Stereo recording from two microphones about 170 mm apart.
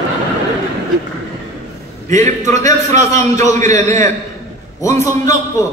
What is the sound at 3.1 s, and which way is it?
A man's voice, 15° left (ahead or behind).